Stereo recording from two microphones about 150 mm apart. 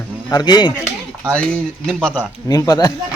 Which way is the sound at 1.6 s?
5° left (ahead or behind).